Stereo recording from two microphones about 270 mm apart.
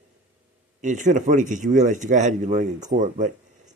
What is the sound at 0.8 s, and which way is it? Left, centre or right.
Speech, right.